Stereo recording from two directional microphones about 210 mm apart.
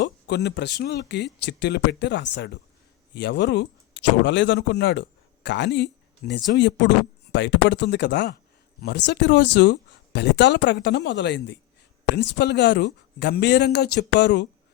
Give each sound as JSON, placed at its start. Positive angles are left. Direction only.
{"t": 0.0, "sound": "a man's voice", "side_deg": 55}